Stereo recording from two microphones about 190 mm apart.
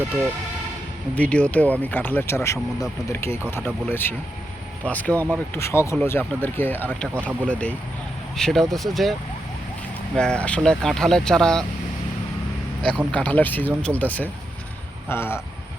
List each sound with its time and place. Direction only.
1.1 s speech: 5° left (ahead or behind)
5.1 s speech: 15° right (ahead or behind)
5.5 s speech: 15° left (ahead or behind)
7.1 s speech: 10° right (ahead or behind)
7.4 s speech: 5° left (ahead or behind)
10.2 s speech: 5° left (ahead or behind)
13.1 s speech: 5° left (ahead or behind)